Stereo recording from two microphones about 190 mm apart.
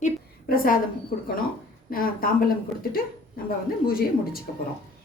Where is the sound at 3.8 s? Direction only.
50° left (ahead or behind).